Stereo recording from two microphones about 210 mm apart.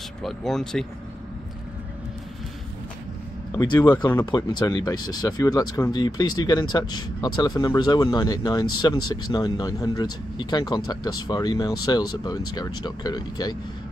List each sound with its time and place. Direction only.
0.2 s speech: centre (ahead or behind)
3.8 s speech: 15° left (ahead or behind)